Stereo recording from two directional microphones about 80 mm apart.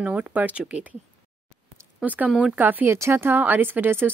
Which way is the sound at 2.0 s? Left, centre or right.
Centre.